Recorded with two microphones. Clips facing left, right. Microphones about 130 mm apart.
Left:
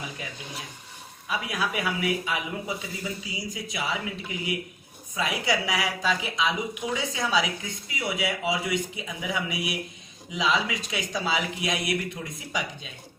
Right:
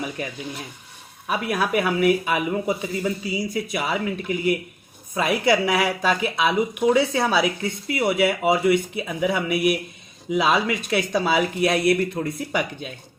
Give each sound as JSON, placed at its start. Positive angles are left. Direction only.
{"t": 1.3, "sound": "speech", "side_deg": -60}